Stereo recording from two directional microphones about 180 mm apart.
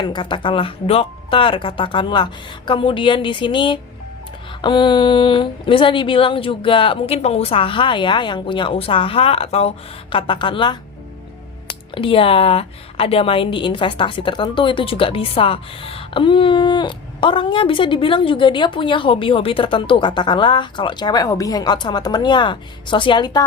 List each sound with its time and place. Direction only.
0.0 s a woman's voice: 25° left (ahead or behind)